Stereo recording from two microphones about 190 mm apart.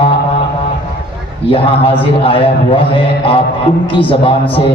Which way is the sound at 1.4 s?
30° left (ahead or behind).